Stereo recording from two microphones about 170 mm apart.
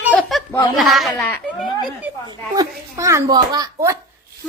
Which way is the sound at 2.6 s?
20° right (ahead or behind).